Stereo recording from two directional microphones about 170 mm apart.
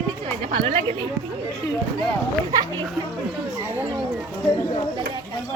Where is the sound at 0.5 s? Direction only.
35° right (ahead or behind).